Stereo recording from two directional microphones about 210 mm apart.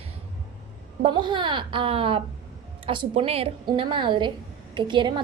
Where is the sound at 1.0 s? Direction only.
20° right (ahead or behind).